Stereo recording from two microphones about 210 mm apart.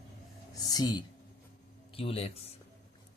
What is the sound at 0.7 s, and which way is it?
A man's voice, 20° left (ahead or behind).